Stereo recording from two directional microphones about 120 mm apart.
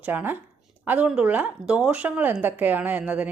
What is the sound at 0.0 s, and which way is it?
Speech, 15° right (ahead or behind).